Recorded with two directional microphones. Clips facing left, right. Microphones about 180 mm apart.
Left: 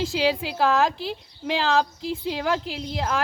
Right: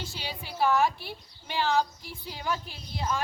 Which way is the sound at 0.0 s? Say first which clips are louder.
Left 16 dB; 90° left.